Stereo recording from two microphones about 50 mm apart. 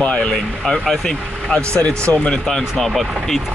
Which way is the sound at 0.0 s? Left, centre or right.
Left.